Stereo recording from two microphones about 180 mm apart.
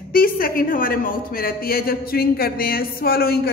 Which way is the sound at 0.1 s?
55° left (ahead or behind).